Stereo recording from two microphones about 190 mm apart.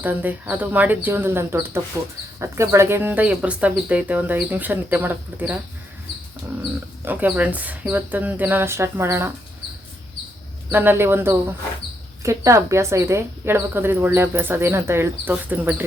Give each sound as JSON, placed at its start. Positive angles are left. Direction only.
{"t": 0.0, "sound": "speech", "side_deg": -10}
{"t": 7.0, "sound": "speech", "side_deg": -10}
{"t": 10.7, "sound": "speech", "side_deg": -10}